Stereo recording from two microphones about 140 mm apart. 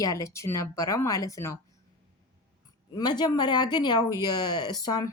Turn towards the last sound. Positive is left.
turn(degrees=25)  # may be behind; listen again after turning